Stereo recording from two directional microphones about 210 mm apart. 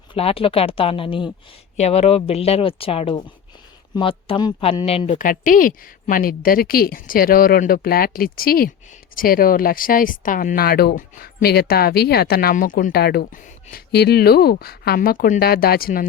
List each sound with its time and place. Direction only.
0.1 s a woman's voice: 25° left (ahead or behind); by 16.0 s 45° left (ahead or behind)